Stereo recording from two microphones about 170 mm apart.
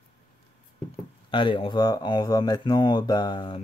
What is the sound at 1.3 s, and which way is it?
Speech, 30° left (ahead or behind).